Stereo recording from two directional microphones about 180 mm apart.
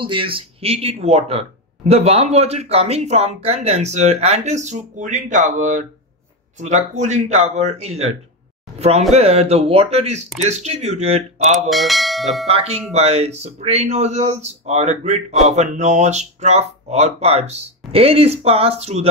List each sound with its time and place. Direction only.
0.0 s speech: 30° right (ahead or behind)
8.7 s a sound: 35° right (ahead or behind)
9.1 s speech: 35° right (ahead or behind)
11.7 s speech: centre (ahead or behind)
12.4 s speech: 35° right (ahead or behind)